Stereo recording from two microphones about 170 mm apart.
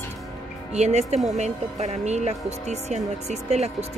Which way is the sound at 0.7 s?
40° right (ahead or behind).